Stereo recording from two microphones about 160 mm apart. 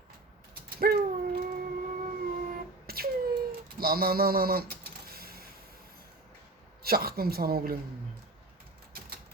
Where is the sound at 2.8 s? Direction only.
70° right (ahead or behind).